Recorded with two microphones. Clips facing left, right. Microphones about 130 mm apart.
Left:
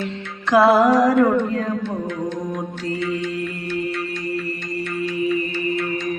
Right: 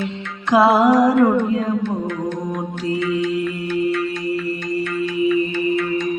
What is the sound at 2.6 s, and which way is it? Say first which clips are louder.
Mantra: right 3 dB; 25° right (ahead or behind).